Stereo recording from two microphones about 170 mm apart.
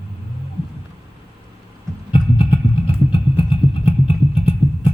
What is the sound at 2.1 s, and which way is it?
Vehicle, 30° left (ahead or behind).